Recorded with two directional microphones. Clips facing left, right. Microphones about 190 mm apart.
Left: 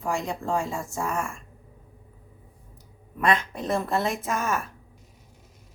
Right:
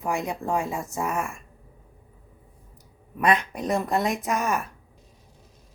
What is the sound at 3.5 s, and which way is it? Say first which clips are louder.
Speech: right 1 dB; 15° right (ahead or behind).